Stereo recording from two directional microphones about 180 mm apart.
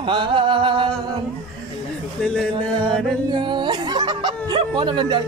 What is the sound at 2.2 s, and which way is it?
Music, 5° left (ahead or behind).